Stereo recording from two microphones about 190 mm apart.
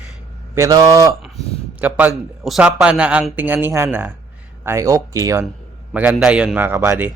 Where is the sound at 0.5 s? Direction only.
15° right (ahead or behind).